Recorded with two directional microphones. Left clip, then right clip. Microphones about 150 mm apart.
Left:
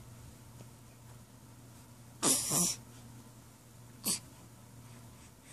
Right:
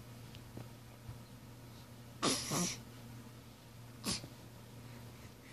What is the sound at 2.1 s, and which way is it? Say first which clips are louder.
Throat clearing: left 3 dB; 30° left (ahead or behind).